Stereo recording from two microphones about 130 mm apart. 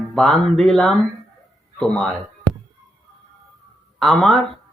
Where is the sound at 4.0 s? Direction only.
5° left (ahead or behind).